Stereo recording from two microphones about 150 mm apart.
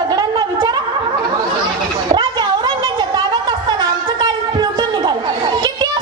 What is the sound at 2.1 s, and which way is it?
Chatter, 30° right (ahead or behind).